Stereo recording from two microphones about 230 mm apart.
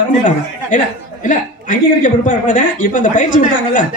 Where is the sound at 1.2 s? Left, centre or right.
Left.